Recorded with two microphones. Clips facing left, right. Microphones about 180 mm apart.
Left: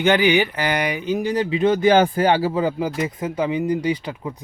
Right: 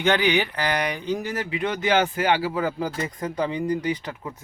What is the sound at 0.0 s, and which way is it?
Speech, 5° left (ahead or behind).